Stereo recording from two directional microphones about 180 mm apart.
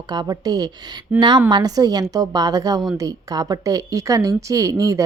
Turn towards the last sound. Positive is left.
turn(degrees=-20)  # may be behind; listen again after turning